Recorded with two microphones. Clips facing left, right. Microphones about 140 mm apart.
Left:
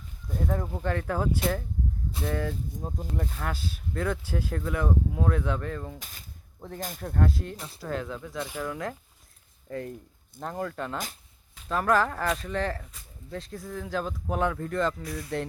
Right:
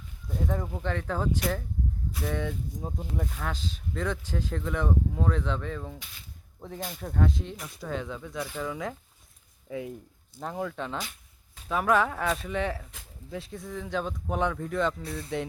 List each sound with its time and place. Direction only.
0.3 s speech: centre (ahead or behind)
6.0 s speech: 45° left (ahead or behind)
7.0 s speech: centre (ahead or behind)
7.5 s speech: 30° left (ahead or behind)
7.8 s speech: centre (ahead or behind)